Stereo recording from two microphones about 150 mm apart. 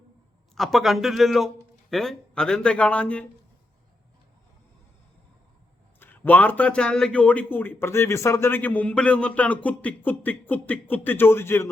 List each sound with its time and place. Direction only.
0.5 s a man's voice: centre (ahead or behind)
6.0 s a man's voice: 10° left (ahead or behind)